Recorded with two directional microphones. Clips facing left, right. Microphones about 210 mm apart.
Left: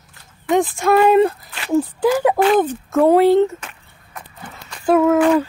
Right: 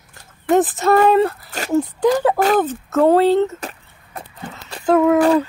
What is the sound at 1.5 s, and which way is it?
Whimper, 40° right (ahead or behind).